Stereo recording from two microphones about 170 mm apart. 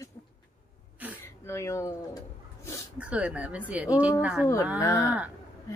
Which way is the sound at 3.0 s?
10° right (ahead or behind).